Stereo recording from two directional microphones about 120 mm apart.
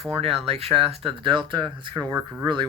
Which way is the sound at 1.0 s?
40° right (ahead or behind).